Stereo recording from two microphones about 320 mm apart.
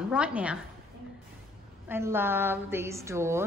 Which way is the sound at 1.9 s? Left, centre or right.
Centre.